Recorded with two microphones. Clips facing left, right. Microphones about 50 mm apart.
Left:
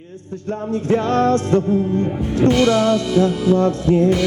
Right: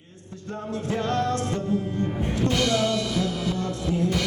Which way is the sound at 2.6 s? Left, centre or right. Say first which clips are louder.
Left 8 dB; left.